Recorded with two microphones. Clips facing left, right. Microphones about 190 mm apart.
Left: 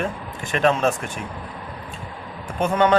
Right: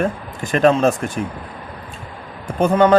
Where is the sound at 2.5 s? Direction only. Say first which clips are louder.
Right 5 dB; 35° right (ahead or behind).